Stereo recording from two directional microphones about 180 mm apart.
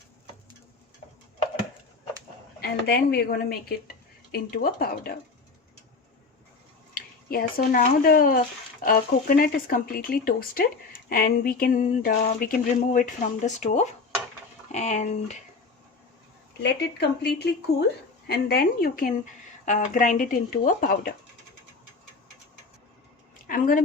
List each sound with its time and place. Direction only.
2.6 s a woman's voice: 60° left (ahead or behind)
6.9 s a woman's voice: 55° left (ahead or behind)
16.6 s a woman's voice: 65° left (ahead or behind)
23.5 s speech: 50° left (ahead or behind)